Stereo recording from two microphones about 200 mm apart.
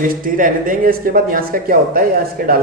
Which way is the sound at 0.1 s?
45° right (ahead or behind).